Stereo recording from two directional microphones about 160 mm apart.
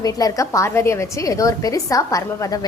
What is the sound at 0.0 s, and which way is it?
A woman's voice, 20° left (ahead or behind).